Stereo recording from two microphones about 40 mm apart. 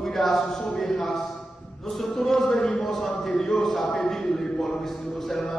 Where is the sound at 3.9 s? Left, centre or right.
Centre.